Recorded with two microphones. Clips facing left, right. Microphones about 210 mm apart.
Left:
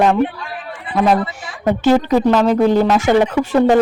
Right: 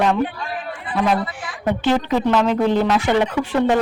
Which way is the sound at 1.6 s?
40° left (ahead or behind).